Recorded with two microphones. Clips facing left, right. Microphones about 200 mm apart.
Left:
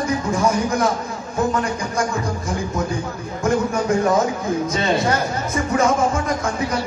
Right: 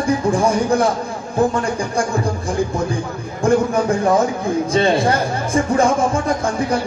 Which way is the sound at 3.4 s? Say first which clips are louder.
Right 4 dB; 30° right (ahead or behind).